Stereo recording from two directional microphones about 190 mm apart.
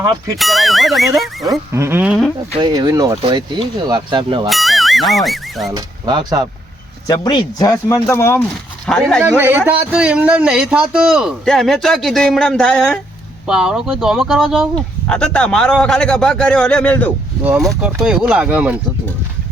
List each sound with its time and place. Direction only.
0.3 s a man's voice: centre (ahead or behind)
1.7 s speech: 15° right (ahead or behind)
2.6 s speech: 20° right (ahead or behind)
4.4 s speech: centre (ahead or behind)
5.7 s speech: 20° right (ahead or behind)
7.1 s a man's voice: 20° left (ahead or behind); by 9.2 s 5° left (ahead or behind)
9.4 s a man's voice: 10° right (ahead or behind); by 17.1 s 5° left (ahead or behind)
17.4 s a man's voice: 5° right (ahead or behind)